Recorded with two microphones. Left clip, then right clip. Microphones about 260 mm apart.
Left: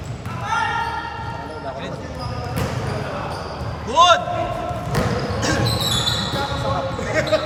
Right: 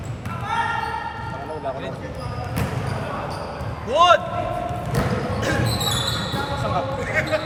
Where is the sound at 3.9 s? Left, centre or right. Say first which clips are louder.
Left 1 dB; centre.